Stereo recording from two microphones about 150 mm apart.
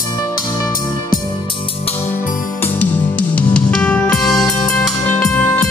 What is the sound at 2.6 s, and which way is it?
Music, 10° left (ahead or behind).